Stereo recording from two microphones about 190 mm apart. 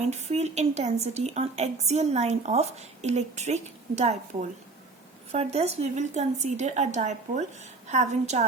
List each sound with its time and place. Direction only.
0.0 s a woman's voice: 35° right (ahead or behind)